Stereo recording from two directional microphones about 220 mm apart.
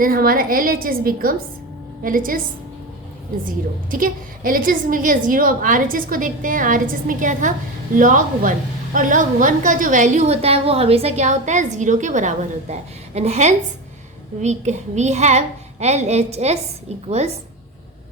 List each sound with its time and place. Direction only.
0.0 s a woman's voice: 40° right (ahead or behind)
3.9 s a woman's voice: 40° right (ahead or behind)